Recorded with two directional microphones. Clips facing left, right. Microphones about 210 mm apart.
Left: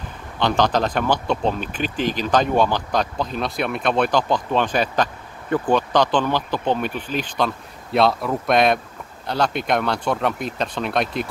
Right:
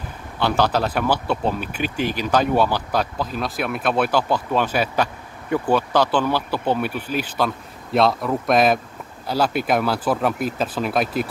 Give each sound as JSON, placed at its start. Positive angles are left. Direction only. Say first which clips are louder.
{"t": 0.4, "sound": "speech", "louder": "left 1 dB", "side_deg": -10}